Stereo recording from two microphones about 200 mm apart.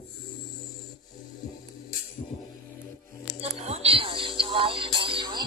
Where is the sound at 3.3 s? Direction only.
30° right (ahead or behind).